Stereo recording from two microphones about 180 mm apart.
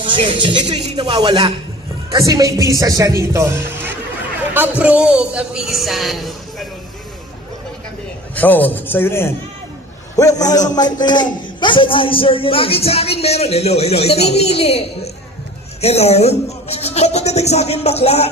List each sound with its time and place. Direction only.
0.0 s a woman's voice: 30° right (ahead or behind); by 6.7 s centre (ahead or behind)
8.4 s a man's voice: 10° left (ahead or behind); by 18.3 s 35° left (ahead or behind)